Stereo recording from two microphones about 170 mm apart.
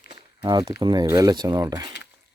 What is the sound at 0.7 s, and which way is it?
Speech, 25° right (ahead or behind).